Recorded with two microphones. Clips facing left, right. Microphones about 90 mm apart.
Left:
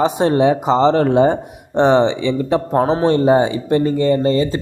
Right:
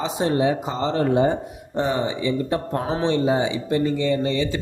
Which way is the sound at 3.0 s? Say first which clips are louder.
Left 5 dB; 50° left (ahead or behind).